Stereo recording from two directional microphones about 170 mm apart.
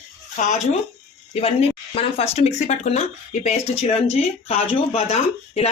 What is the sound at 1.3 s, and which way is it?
Speech, 35° left (ahead or behind).